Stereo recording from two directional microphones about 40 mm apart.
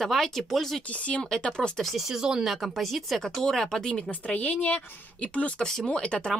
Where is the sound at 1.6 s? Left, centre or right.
Centre.